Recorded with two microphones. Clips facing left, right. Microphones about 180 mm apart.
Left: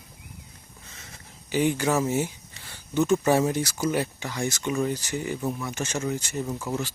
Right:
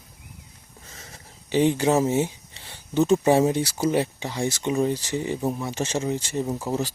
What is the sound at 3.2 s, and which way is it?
Speech, 25° right (ahead or behind).